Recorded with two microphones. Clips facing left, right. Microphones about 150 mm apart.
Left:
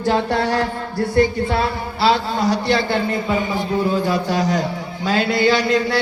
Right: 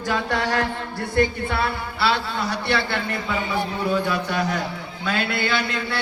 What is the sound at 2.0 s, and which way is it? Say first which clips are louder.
A man's voice: left 6 dB; 60° right (ahead or behind).